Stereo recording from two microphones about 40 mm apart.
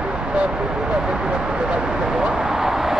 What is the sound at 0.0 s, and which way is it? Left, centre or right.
Vehicle, right.